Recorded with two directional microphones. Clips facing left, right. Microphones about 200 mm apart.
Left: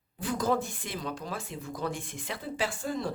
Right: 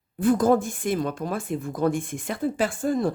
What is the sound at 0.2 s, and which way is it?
Speech, 50° right (ahead or behind).